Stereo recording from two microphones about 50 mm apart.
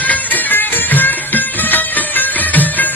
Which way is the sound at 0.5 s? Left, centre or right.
Left.